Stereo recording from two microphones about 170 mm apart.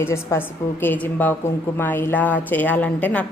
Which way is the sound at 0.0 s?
15° left (ahead or behind).